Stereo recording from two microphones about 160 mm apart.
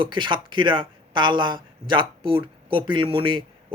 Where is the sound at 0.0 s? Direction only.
30° right (ahead or behind).